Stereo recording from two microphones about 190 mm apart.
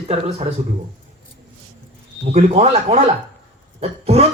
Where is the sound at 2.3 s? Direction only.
35° right (ahead or behind).